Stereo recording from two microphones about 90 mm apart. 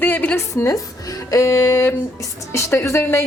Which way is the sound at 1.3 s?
30° left (ahead or behind).